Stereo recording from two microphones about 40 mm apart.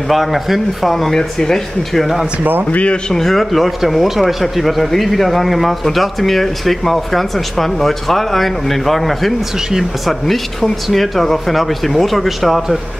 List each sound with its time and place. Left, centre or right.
0.1 s speech: centre
2.7 s a man's voice: left
3.1 s speech: centre
9.7 s speech: centre
10.2 s speech: centre